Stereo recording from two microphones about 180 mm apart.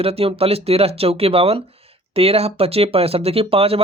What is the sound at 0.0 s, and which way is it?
Speech, 35° right (ahead or behind).